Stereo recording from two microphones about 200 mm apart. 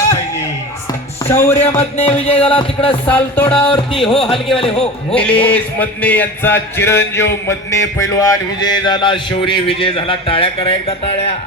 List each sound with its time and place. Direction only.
1.2 s music: 10° left (ahead or behind)
1.8 s music: 30° left (ahead or behind)
3.1 s speech: 10° left (ahead or behind)
3.7 s music: 25° left (ahead or behind)
5.1 s speech: 5° left (ahead or behind); by 11.3 s 30° left (ahead or behind)